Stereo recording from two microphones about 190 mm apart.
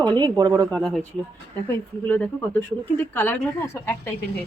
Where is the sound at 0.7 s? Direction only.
5° left (ahead or behind).